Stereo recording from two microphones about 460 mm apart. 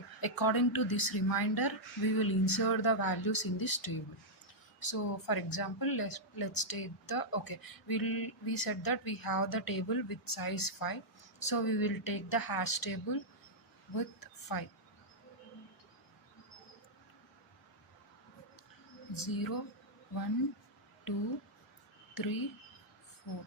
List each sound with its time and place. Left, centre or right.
0.2 s a woman's voice: left
19.1 s a woman's voice: left
22.1 s speech: left